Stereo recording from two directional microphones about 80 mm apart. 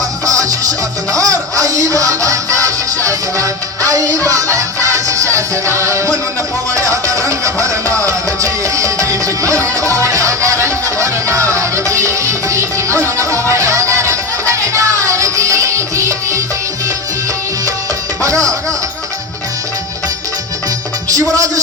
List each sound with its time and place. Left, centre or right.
0.3 s music: right
18.2 s music: right
21.1 s music: right